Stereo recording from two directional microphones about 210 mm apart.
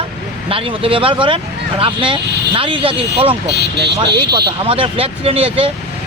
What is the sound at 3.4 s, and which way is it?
Speech, 55° right (ahead or behind).